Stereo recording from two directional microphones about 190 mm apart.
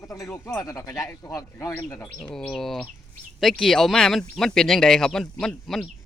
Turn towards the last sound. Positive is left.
turn(degrees=5)  # may be behind; listen again after turning